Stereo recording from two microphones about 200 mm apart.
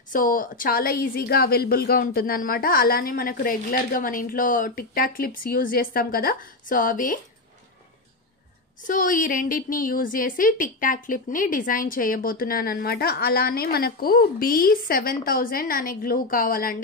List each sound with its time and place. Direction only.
0.1 s a woman's voice: 45° left (ahead or behind)
8.8 s a woman's voice: 40° left (ahead or behind)